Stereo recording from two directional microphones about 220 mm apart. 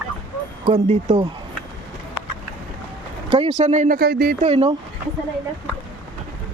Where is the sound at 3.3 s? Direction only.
30° right (ahead or behind).